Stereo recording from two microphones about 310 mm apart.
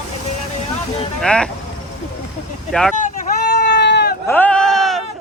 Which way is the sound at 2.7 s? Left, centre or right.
Centre.